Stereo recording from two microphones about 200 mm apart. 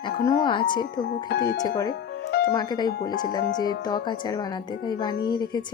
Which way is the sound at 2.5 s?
20° left (ahead or behind).